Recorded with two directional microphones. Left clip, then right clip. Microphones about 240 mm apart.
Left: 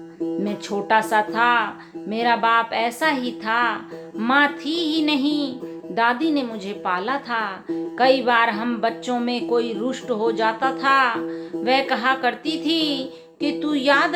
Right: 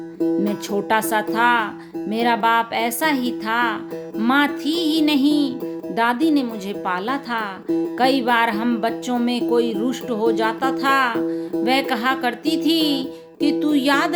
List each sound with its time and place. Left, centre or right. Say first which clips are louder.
0.4 s music: right 2 dB; right
7.9 s speech: left 2 dB; right